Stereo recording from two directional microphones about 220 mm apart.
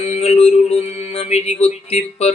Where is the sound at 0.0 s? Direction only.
30° left (ahead or behind).